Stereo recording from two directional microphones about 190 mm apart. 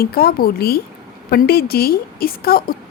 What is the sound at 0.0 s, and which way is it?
A woman's voice, 55° left (ahead or behind).